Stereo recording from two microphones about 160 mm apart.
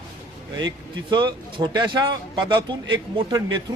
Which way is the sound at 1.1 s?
30° right (ahead or behind).